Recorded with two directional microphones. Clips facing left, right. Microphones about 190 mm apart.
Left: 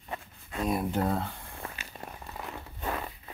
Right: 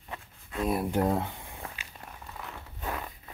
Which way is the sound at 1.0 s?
15° right (ahead or behind).